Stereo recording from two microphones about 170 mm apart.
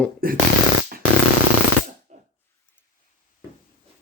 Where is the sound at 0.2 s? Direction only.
60° right (ahead or behind).